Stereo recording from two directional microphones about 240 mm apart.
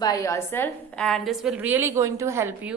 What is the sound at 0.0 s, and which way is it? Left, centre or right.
A woman's voice, centre.